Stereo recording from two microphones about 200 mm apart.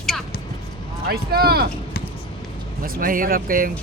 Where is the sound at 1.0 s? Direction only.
50° right (ahead or behind).